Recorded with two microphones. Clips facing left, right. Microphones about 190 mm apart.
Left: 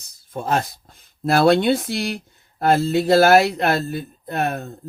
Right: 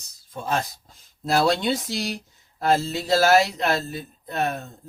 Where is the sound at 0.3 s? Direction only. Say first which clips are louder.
Left 4 dB; 55° left (ahead or behind).